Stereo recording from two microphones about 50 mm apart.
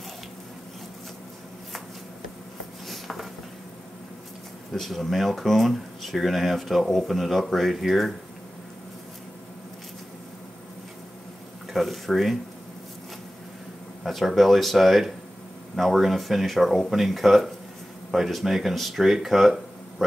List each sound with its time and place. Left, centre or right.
2.9 s a sound: centre
4.7 s speech: centre
11.7 s speech: centre
14.0 s speech: centre